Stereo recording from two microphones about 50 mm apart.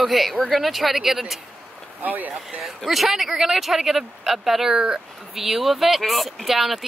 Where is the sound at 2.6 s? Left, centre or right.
Centre.